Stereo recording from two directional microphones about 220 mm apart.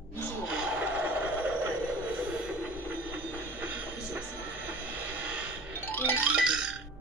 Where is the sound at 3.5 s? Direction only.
10° right (ahead or behind).